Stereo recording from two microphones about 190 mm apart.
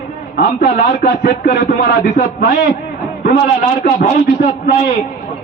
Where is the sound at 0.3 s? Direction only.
55° left (ahead or behind).